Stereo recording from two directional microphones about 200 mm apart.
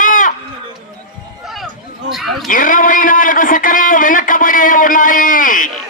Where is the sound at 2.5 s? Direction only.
40° left (ahead or behind).